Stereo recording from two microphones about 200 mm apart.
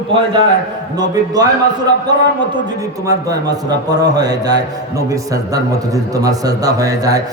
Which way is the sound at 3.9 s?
20° right (ahead or behind).